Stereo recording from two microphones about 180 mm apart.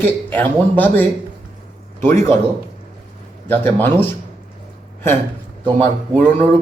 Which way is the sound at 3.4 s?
10° left (ahead or behind).